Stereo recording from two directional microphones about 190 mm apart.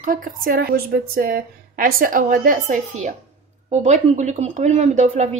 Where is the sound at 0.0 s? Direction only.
45° right (ahead or behind).